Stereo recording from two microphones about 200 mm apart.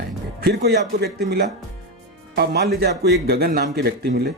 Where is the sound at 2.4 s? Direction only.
55° right (ahead or behind).